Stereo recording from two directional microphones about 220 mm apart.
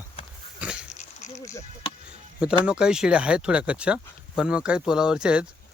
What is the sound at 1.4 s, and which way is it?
Speech, 15° left (ahead or behind).